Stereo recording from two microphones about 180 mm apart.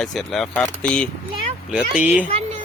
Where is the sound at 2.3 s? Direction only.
35° right (ahead or behind).